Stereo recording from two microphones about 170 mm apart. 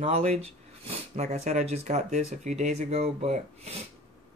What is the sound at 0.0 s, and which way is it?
Speech, 40° right (ahead or behind).